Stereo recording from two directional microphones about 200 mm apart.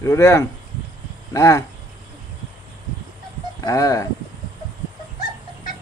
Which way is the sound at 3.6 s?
15° left (ahead or behind).